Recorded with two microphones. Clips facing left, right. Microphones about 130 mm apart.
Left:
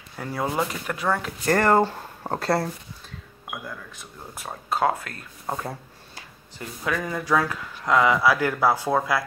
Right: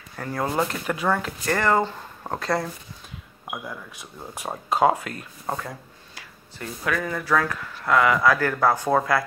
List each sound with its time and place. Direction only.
0.2 s speech: 5° left (ahead or behind)
1.4 s speech: 45° left (ahead or behind)
2.2 s speech: 35° left (ahead or behind)
4.4 s speech: 15° right (ahead or behind)
5.6 s a sound: 25° left (ahead or behind)
6.9 s speech: 15° left (ahead or behind)